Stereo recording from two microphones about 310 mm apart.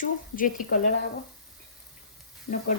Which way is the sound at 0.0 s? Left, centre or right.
Left.